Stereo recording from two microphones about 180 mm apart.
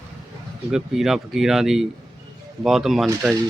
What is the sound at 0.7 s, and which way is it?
Speech, centre (ahead or behind).